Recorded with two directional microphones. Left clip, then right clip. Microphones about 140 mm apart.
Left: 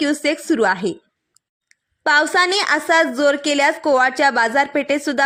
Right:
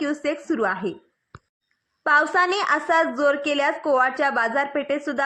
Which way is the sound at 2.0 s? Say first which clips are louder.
Left 3 dB; 45° left (ahead or behind).